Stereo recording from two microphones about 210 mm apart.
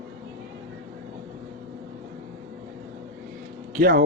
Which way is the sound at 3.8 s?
45° right (ahead or behind).